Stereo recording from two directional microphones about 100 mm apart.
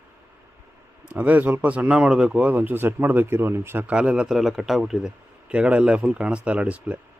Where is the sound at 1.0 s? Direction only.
15° right (ahead or behind).